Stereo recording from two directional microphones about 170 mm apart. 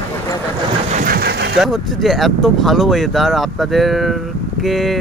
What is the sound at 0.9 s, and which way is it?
Engine, 55° right (ahead or behind).